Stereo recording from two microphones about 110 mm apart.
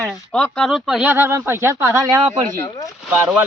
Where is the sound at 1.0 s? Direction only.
20° right (ahead or behind).